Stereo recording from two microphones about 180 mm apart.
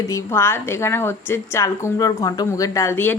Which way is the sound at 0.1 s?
15° left (ahead or behind).